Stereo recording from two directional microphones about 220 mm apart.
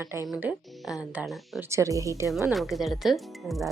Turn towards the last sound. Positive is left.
turn(degrees=0)  # may be behind; listen again after turning